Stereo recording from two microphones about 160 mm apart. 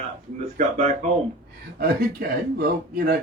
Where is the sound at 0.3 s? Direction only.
50° right (ahead or behind).